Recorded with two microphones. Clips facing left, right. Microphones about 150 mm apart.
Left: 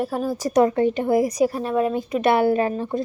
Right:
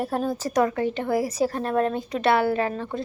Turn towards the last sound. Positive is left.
turn(degrees=15)  # may be behind; listen again after turning